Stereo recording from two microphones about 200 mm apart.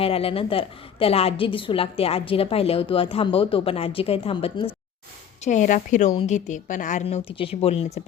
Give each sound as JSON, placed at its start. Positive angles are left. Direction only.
{"t": 0.0, "sound": "a woman's voice", "side_deg": 30}
{"t": 5.5, "sound": "a woman's voice", "side_deg": 40}